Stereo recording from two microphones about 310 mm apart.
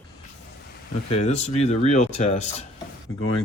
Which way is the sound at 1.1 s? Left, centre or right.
Left.